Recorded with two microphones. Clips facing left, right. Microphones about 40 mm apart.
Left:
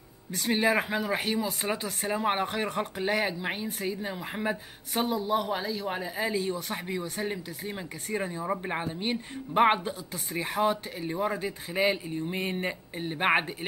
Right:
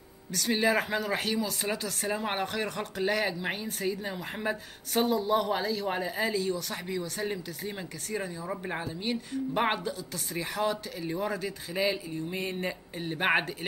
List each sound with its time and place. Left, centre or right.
0.5 s speech: centre
1.2 s speech: left
2.1 s speech: centre
2.4 s speech: left; by 6.3 s centre
6.3 s speech: left
8.2 s speech: left
8.5 s speech: left
8.8 s speech: left
12.9 s speech: centre